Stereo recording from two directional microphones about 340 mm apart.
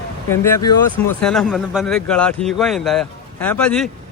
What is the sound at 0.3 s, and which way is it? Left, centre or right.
Speech, centre.